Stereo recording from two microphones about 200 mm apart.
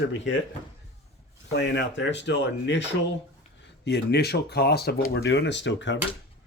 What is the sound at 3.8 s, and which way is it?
Speech, 55° left (ahead or behind).